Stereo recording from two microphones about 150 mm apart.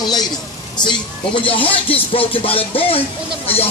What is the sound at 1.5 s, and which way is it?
Speech, 35° left (ahead or behind).